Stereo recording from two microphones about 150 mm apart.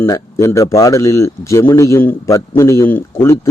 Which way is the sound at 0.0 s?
20° left (ahead or behind).